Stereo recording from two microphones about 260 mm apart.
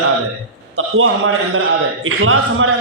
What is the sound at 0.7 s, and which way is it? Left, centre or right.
A man's voice, right.